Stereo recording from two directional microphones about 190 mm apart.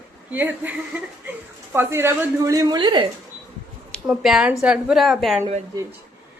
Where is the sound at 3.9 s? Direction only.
Centre (ahead or behind).